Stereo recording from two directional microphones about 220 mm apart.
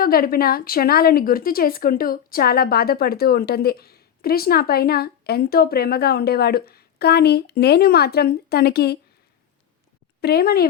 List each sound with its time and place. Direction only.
0.0 s a woman's voice: 40° left (ahead or behind)
10.2 s a woman's voice: 45° left (ahead or behind)